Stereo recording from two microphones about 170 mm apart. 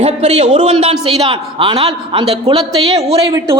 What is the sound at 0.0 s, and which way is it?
A woman's voice, 40° right (ahead or behind).